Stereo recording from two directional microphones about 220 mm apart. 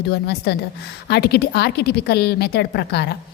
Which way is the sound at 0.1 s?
50° left (ahead or behind).